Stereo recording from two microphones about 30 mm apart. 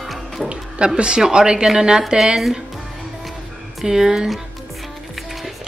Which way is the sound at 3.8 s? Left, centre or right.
Centre.